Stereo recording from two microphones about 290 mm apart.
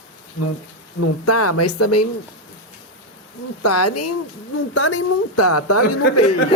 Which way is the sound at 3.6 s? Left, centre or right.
Left.